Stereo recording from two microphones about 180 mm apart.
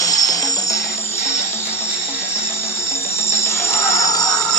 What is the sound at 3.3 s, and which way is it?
Music, 15° left (ahead or behind).